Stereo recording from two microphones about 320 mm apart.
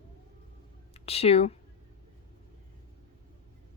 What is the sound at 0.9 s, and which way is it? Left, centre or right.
Speech, centre.